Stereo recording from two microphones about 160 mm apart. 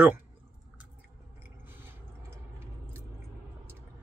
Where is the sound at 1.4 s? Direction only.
15° right (ahead or behind).